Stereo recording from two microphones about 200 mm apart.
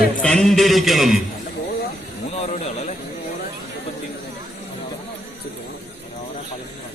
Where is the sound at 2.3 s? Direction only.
30° left (ahead or behind).